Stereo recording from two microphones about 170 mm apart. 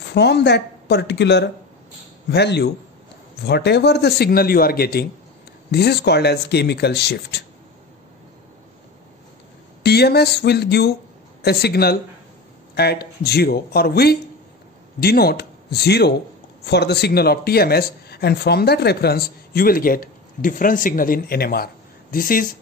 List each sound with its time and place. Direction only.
0.1 s speech: 80° left
9.8 s speech: 70° left (ahead or behind); by 22.5 s 55° left (ahead or behind)